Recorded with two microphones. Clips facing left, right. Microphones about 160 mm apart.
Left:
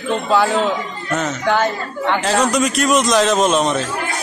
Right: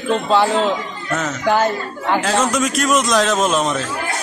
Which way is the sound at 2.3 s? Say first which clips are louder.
Left 3 dB; centre (ahead or behind).